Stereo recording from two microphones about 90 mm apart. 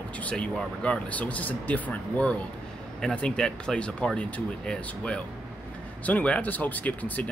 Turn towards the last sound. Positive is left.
turn(degrees=20)  # may be behind; listen again after turning